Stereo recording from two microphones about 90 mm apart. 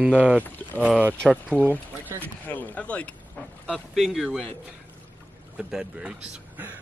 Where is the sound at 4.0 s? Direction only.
5° right (ahead or behind).